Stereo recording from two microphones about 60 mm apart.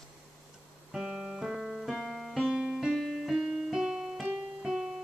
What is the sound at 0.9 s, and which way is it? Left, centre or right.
Music, centre.